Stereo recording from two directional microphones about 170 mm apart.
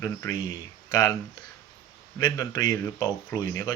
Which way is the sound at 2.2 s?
25° left (ahead or behind).